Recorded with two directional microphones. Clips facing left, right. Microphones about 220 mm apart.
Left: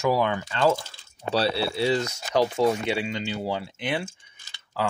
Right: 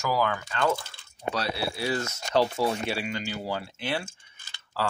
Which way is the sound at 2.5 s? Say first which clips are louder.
Left 5 dB; 20° left (ahead or behind).